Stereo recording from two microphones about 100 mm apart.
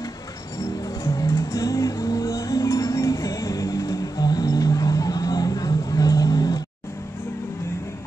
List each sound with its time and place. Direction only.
1.0 s music: 35° left (ahead or behind)